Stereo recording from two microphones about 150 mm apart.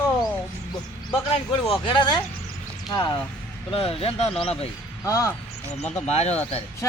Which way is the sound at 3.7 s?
40° left (ahead or behind).